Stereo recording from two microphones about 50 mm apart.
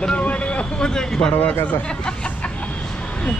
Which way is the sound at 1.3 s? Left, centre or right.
Left.